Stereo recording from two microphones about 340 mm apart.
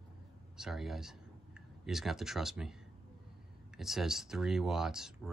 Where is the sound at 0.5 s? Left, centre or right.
Centre.